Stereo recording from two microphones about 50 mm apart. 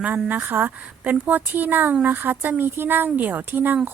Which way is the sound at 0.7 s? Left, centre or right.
Right.